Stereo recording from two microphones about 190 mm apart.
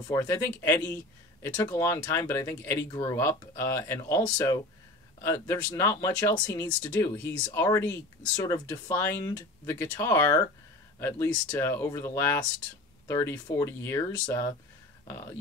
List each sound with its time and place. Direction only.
0.1 s speech: 15° left (ahead or behind)